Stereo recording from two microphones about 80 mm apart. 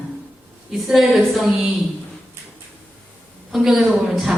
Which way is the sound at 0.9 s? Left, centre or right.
Centre.